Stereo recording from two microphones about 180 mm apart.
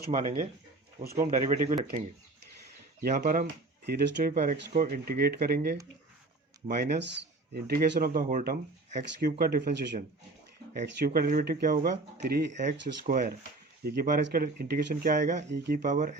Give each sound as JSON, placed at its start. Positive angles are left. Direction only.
{"t": 0.0, "sound": "speech", "side_deg": -50}
{"t": 3.0, "sound": "speech", "side_deg": -55}
{"t": 3.8, "sound": "speech", "side_deg": -65}
{"t": 4.3, "sound": "speech", "side_deg": -45}
{"t": 10.8, "sound": "speech", "side_deg": -60}
{"t": 13.1, "sound": "speech", "side_deg": -45}
{"t": 15.1, "sound": "speech", "side_deg": -45}
{"t": 15.4, "sound": "speech", "side_deg": -65}
{"t": 15.8, "sound": "speech", "side_deg": -45}